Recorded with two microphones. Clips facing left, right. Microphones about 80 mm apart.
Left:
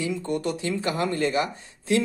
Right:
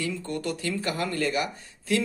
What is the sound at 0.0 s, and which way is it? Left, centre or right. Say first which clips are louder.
Speech: left 4 dB; centre.